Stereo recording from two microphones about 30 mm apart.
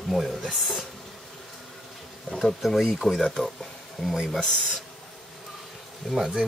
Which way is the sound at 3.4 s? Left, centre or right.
Left.